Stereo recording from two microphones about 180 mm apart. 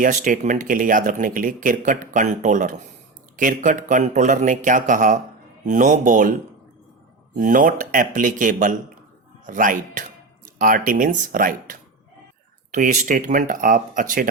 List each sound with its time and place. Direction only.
0.0 s speech: 45° right (ahead or behind)
7.3 s speech: 50° right (ahead or behind)